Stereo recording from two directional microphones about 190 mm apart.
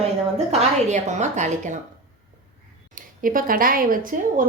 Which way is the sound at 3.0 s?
45° right (ahead or behind).